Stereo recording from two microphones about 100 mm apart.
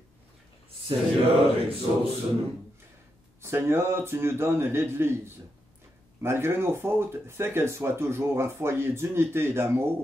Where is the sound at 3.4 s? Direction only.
25° right (ahead or behind).